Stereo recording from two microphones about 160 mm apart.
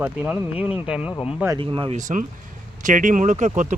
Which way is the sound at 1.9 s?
50° right (ahead or behind).